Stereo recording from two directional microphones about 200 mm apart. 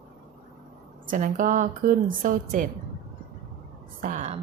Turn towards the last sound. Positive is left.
turn(degrees=-40)  # may be behind; listen again after turning